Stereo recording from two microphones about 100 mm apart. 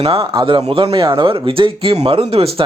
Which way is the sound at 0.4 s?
65° right (ahead or behind).